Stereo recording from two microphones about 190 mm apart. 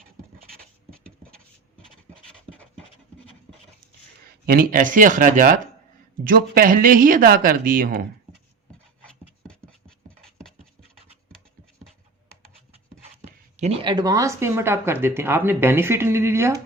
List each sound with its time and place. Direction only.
0.5 s a sound: 50° right (ahead or behind)
2.5 s pant: 30° right (ahead or behind)
4.4 s speech: 50° right (ahead or behind)
13.6 s speech: 30° right (ahead or behind); by 16.6 s 15° right (ahead or behind)